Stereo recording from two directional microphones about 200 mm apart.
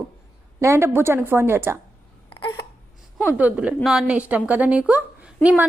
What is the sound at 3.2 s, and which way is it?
A woman's voice, 5° right (ahead or behind).